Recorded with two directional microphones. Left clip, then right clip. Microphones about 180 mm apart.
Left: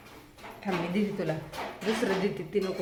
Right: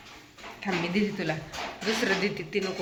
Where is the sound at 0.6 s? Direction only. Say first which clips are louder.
Right 2 dB; 5° left (ahead or behind).